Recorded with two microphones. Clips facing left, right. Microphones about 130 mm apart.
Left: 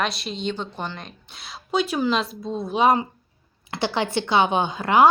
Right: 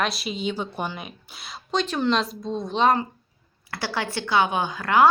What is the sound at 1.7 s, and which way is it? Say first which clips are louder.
Speech: left 1 dB; 10° left (ahead or behind).